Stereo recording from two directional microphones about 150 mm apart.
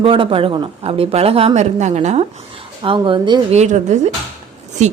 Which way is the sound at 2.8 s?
35° right (ahead or behind).